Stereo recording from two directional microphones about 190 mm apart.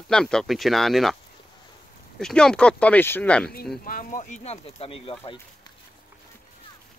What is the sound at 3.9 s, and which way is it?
Speech, 45° left (ahead or behind).